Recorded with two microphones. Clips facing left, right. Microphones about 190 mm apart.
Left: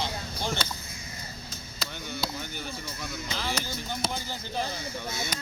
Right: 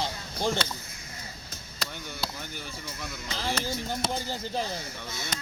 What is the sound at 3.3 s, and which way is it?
Speech, 30° right (ahead or behind).